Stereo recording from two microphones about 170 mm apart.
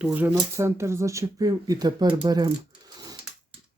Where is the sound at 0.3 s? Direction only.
20° right (ahead or behind).